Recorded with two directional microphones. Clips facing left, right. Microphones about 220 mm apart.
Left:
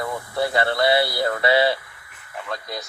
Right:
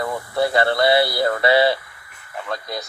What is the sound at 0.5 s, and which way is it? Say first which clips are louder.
Speech: right 2 dB; 40° right (ahead or behind).